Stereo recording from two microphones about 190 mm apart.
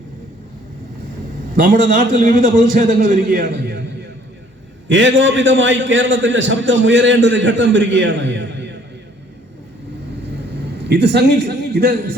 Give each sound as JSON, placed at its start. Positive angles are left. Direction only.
{"t": 1.5, "sound": "a man's voice", "side_deg": -45}
{"t": 4.9, "sound": "a man's voice", "side_deg": -80}
{"t": 10.8, "sound": "a man's voice", "side_deg": -60}